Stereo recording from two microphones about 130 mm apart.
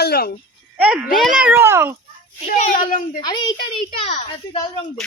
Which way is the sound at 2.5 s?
90° left.